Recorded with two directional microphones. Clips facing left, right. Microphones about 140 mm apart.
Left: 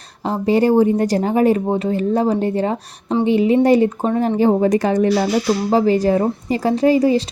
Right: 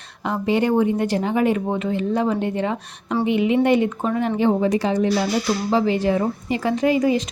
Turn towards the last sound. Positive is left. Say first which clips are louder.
# left 4 dB
turn(degrees=35)  # may be behind; listen again after turning